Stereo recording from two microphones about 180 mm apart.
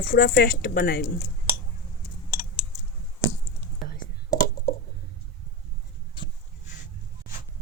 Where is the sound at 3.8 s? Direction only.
55° left (ahead or behind).